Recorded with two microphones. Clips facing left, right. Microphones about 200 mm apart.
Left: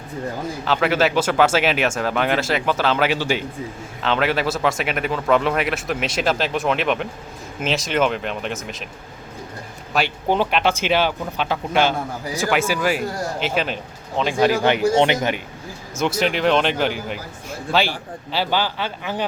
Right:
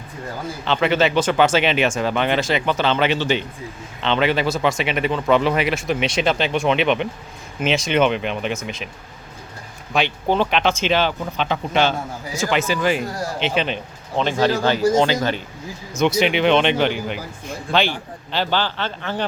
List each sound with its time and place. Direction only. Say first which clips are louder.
0.6 s speech: right 1 dB; 5° left (ahead or behind)
9.9 s speech: right 1 dB; 10° left (ahead or behind)
16.0 s speech: right 3 dB; 5° left (ahead or behind)
18.3 s speech: even; 10° left (ahead or behind)